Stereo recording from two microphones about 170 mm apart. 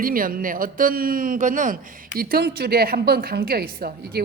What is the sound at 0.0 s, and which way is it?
A man's voice, 55° right (ahead or behind).